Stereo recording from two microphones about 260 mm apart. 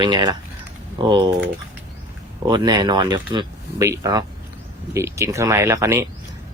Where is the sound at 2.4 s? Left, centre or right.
Centre.